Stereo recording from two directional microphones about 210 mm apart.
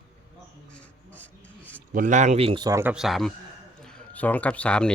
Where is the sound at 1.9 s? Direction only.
40° right (ahead or behind).